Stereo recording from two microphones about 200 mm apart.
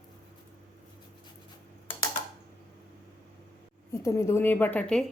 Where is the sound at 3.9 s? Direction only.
15° left (ahead or behind).